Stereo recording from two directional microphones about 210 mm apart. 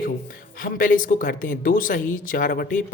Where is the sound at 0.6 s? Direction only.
40° left (ahead or behind).